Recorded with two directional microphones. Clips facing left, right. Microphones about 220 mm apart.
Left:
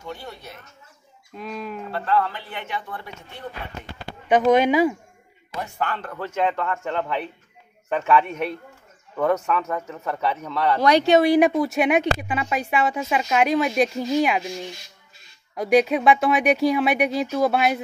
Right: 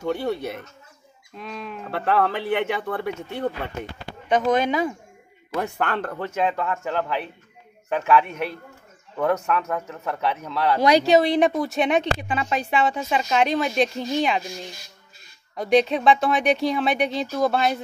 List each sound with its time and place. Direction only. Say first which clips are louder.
0.0 s a man's voice: right 10 dB; 65° right (ahead or behind)
1.3 s speech: left 3 dB; centre (ahead or behind)
1.9 s a man's voice: right 2 dB; 65° right (ahead or behind)
4.3 s speech: left 4 dB; 10° left (ahead or behind)
5.6 s a man's voice: right 3 dB; 60° right (ahead or behind)
6.3 s speech: left 1 dB; 5° right (ahead or behind)
11.1 s speech: left 2 dB; 10° left (ahead or behind)
15.5 s speech: left 1 dB; 5° left (ahead or behind)